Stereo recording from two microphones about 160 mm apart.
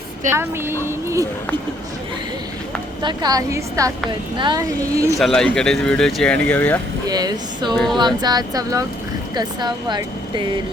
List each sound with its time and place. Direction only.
0.3 s a woman's voice: 15° right (ahead or behind)
3.0 s speech: 30° right (ahead or behind)
5.2 s speech: 5° left (ahead or behind)
7.1 s speech: 25° right (ahead or behind)